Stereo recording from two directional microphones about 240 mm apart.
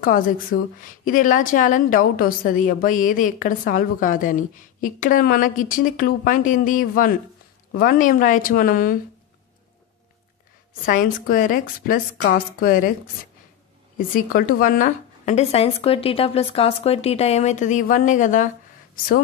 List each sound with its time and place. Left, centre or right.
0.0 s a woman's voice: left
10.9 s a woman's voice: left
13.9 s a woman's voice: left